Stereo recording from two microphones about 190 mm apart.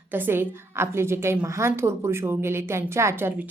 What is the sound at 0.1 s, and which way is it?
A woman's voice, 10° right (ahead or behind).